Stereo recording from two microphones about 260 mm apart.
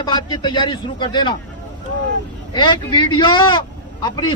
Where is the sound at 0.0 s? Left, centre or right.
Centre.